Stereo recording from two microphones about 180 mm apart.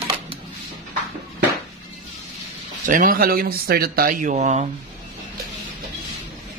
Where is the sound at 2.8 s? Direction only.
50° right (ahead or behind).